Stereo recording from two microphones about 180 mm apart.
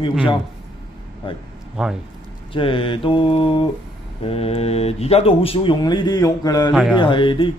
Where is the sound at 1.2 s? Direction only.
30° left (ahead or behind).